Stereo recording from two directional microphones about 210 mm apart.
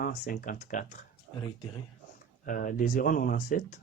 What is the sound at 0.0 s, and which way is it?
Speech, 40° left (ahead or behind).